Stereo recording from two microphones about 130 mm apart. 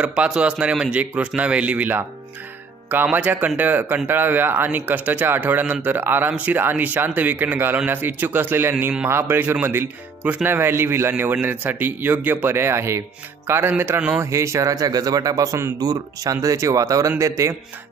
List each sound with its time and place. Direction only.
0.0 s a man's voice: 10° right (ahead or behind)